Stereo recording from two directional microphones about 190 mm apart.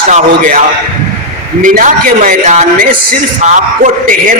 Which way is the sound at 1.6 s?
45° right (ahead or behind).